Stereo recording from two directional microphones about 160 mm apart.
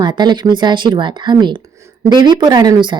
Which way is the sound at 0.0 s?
30° right (ahead or behind).